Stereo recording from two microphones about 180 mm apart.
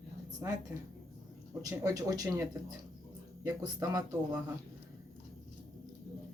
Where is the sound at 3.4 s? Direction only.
20° right (ahead or behind).